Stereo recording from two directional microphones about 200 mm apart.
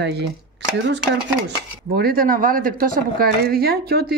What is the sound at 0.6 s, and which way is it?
Cutlery, 60° right (ahead or behind).